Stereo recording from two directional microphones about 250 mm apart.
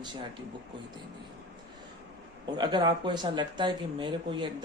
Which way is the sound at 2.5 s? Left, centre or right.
Centre.